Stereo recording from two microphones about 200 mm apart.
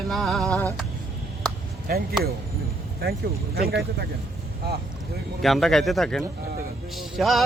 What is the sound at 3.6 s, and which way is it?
Speech, 50° right (ahead or behind).